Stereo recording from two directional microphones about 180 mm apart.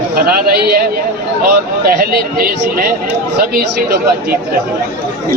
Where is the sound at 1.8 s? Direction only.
55° right (ahead or behind).